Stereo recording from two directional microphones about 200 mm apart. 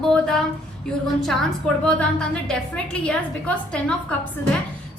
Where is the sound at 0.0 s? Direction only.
Centre (ahead or behind).